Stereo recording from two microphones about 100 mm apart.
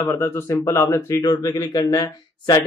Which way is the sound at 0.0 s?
30° left (ahead or behind).